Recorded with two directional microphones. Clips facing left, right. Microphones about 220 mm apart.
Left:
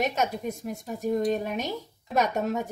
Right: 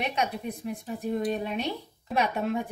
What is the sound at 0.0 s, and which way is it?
A woman's voice, 45° left (ahead or behind).